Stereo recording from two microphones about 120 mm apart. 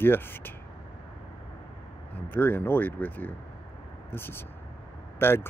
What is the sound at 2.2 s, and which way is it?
Speech, 15° left (ahead or behind).